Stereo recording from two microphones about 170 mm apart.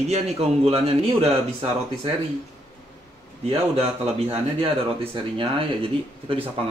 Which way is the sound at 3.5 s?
35° right (ahead or behind).